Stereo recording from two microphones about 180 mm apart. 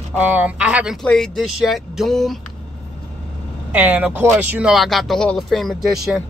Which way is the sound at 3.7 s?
10° right (ahead or behind).